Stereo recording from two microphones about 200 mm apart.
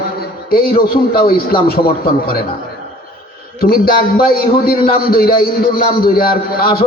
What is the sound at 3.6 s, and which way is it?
A man's voice, 50° left (ahead or behind).